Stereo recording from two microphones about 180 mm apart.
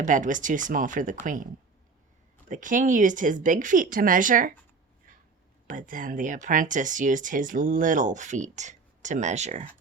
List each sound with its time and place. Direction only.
0.0 s speech: 45° right (ahead or behind)
2.5 s speech: 45° right (ahead or behind)
5.6 s speech: 50° right (ahead or behind)